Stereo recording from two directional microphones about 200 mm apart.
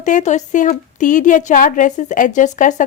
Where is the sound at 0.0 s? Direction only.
35° left (ahead or behind).